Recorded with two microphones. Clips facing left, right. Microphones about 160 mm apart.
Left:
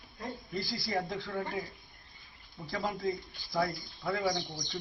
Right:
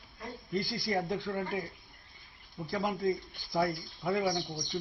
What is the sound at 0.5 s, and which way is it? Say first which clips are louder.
Speech: right 3 dB; 10° right (ahead or behind).